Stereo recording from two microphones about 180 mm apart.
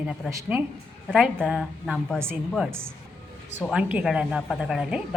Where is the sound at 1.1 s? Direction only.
Centre (ahead or behind).